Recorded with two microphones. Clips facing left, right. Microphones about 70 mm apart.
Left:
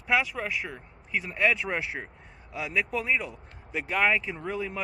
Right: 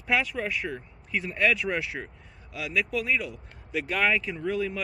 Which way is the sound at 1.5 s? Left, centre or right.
Left.